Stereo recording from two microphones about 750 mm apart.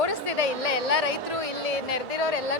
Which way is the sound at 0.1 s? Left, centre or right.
Left.